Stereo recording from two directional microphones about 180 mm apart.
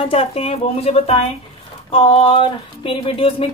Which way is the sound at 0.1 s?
35° left (ahead or behind).